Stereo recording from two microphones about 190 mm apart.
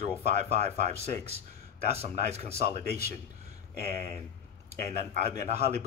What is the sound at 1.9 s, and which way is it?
Speech, 35° right (ahead or behind).